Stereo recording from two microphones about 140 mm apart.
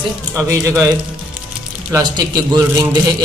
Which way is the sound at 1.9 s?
25° right (ahead or behind).